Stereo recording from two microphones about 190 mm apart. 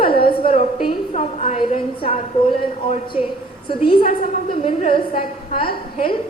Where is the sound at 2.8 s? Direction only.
30° left (ahead or behind).